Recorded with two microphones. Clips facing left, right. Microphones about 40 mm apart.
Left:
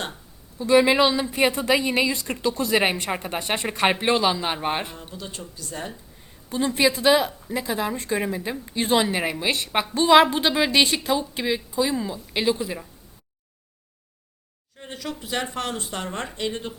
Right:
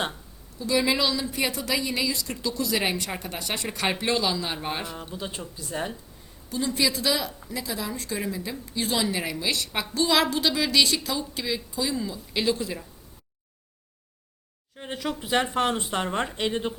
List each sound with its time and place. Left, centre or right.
0.6 s a woman's voice: left
5.1 s speech: centre
6.5 s a woman's voice: left; by 12.9 s centre
14.8 s speech: centre